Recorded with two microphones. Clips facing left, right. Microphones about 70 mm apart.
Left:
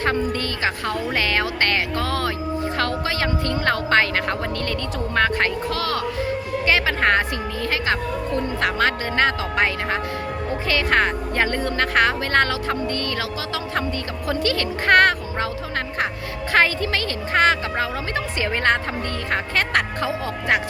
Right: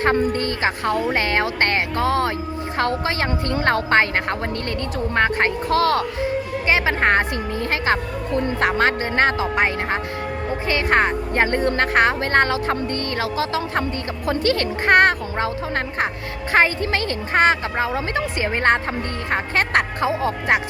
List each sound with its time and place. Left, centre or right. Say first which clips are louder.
0.3 s a woman's voice: right 2 dB; right
6.7 s a woman's voice: right 1 dB; right
14.8 s speech: right 1 dB; right
16.5 s speech: right 1 dB; right